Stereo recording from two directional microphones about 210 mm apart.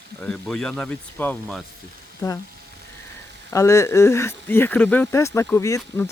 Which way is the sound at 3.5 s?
15° left (ahead or behind).